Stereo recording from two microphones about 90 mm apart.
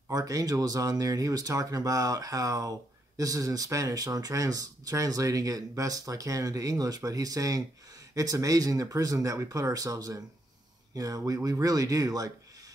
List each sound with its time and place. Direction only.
0.1 s speech: 40° right (ahead or behind)